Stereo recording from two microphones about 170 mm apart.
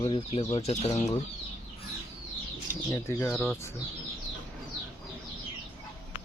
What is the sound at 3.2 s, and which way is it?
Speech, centre (ahead or behind).